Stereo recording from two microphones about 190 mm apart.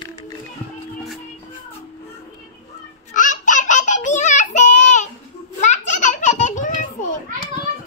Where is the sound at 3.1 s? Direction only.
40° left (ahead or behind).